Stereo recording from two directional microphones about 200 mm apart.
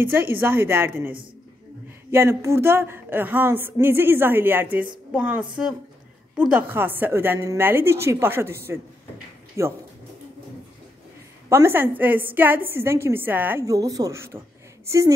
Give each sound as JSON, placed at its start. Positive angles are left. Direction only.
{"t": 0.0, "sound": "a woman's voice", "side_deg": -10}
{"t": 11.4, "sound": "a woman's voice", "side_deg": -10}